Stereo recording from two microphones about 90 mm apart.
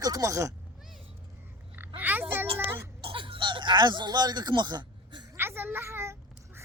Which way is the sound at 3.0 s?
80° right.